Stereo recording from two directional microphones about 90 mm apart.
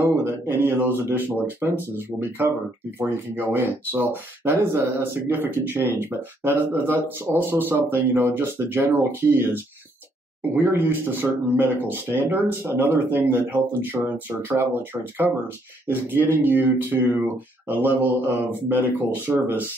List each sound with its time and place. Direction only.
0.0 s speech: 25° right (ahead or behind)
15.9 s speech: 25° right (ahead or behind)